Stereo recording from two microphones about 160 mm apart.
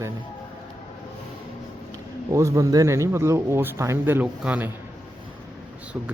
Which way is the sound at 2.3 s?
20° right (ahead or behind).